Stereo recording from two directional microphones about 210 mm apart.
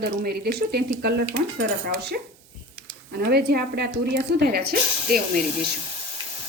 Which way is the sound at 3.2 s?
50° right (ahead or behind).